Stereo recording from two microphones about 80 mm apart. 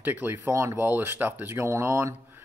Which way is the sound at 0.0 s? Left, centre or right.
Right.